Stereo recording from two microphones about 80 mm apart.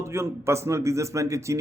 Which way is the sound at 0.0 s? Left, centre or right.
Right.